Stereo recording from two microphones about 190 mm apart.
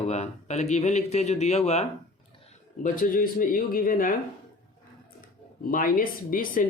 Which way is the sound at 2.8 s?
45° left (ahead or behind).